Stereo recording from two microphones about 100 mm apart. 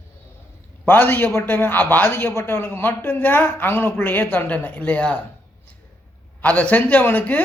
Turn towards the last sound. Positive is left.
turn(degrees=15)  # may be behind; listen again after turning